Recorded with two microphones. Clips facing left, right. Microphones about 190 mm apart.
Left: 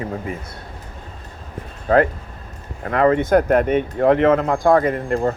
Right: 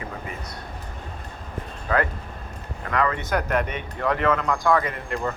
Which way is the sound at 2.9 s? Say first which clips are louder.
Left 8 dB; 30° left (ahead or behind).